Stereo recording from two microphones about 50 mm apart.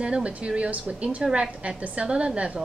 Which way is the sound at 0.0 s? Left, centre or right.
Right.